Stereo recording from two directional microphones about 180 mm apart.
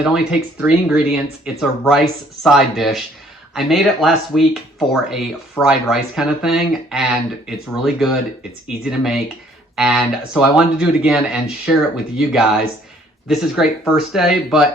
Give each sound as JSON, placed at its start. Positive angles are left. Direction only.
{"t": 0.0, "sound": "speech", "side_deg": -5}